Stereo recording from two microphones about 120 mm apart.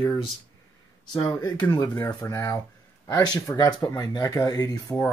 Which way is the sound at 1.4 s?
30° left (ahead or behind).